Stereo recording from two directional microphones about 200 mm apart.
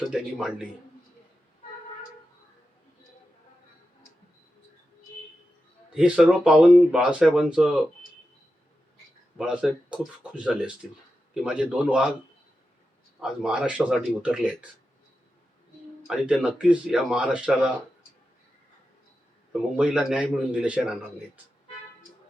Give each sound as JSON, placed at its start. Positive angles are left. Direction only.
{"t": 0.1, "sound": "speech", "side_deg": -5}
{"t": 5.9, "sound": "speech", "side_deg": -5}
{"t": 9.4, "sound": "speech", "side_deg": -5}
{"t": 13.1, "sound": "speech", "side_deg": -5}
{"t": 16.0, "sound": "speech", "side_deg": -5}
{"t": 19.7, "sound": "speech", "side_deg": -5}